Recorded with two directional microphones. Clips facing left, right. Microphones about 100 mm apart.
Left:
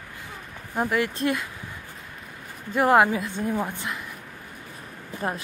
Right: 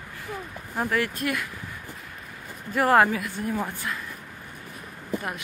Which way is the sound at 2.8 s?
20° left (ahead or behind).